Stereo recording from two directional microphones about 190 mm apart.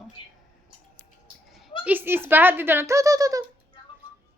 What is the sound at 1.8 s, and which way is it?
Speech, 10° right (ahead or behind).